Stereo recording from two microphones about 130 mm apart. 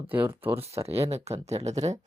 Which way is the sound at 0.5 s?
50° right (ahead or behind).